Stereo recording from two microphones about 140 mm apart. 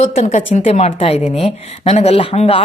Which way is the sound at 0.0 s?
55° left (ahead or behind).